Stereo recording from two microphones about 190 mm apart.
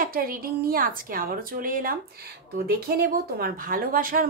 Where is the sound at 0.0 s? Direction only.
50° right (ahead or behind).